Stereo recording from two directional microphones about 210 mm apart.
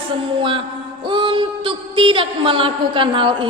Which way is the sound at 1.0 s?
25° right (ahead or behind).